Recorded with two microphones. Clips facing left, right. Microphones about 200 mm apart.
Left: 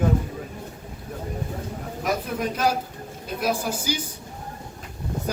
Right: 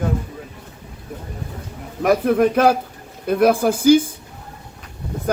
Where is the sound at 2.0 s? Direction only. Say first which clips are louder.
Right 11 dB; 60° right (ahead or behind).